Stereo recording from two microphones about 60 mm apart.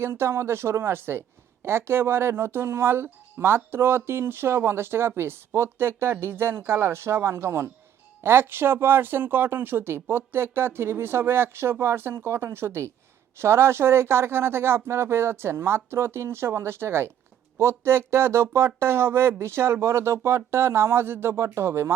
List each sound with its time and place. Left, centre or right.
0.0 s speech: right